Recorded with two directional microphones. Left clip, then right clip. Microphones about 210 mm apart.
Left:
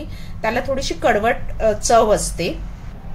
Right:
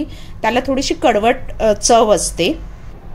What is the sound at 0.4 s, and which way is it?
Speech, 40° right (ahead or behind).